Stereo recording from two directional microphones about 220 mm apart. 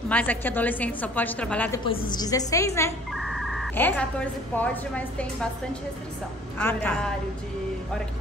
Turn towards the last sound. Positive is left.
turn(degrees=5)  # may be behind; listen again after turning